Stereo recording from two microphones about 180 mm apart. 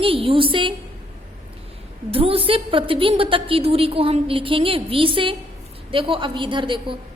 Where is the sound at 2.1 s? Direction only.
30° right (ahead or behind).